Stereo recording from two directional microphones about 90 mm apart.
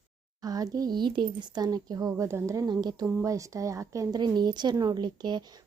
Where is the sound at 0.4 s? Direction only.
45° right (ahead or behind).